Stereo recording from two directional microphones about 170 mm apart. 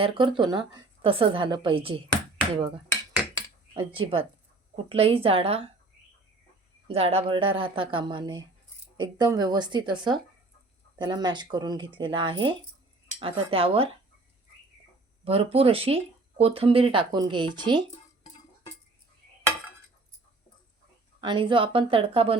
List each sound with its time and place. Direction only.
0.0 s speech: 30° right (ahead or behind)
3.8 s speech: 30° right (ahead or behind)
6.8 s speech: 35° right (ahead or behind)
15.2 s speech: 35° right (ahead or behind)
21.2 s speech: 30° right (ahead or behind)